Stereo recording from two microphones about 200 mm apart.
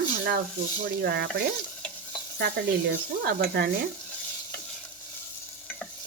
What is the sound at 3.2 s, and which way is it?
Speech, 50° right (ahead or behind).